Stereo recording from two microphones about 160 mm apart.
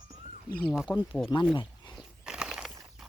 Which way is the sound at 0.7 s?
5° right (ahead or behind).